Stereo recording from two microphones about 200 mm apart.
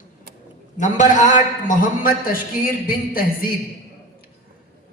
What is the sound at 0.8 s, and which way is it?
A man's voice, 40° left (ahead or behind).